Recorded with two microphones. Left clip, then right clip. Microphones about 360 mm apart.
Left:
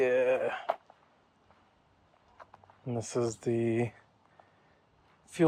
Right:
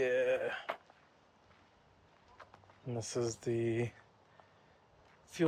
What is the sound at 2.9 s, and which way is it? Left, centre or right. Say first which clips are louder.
Speech: left 5 dB; centre.